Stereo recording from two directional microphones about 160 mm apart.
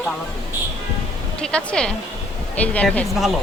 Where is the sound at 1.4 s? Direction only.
5° left (ahead or behind).